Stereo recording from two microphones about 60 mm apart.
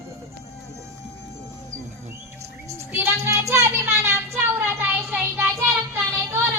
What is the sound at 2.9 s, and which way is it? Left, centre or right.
Child singing, right.